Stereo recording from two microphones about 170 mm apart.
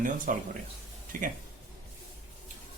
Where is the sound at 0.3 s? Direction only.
50° right (ahead or behind).